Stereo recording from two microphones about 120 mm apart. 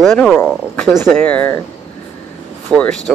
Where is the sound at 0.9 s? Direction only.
20° left (ahead or behind).